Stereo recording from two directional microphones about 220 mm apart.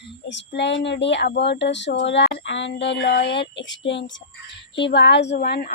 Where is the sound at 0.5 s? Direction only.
55° left (ahead or behind).